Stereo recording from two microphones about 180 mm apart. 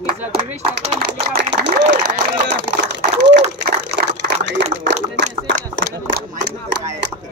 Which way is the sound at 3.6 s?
75° right (ahead or behind).